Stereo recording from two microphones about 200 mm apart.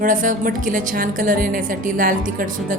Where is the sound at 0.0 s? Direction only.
40° right (ahead or behind).